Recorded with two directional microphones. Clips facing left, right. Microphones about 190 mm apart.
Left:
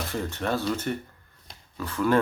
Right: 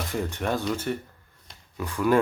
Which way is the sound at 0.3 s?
15° right (ahead or behind).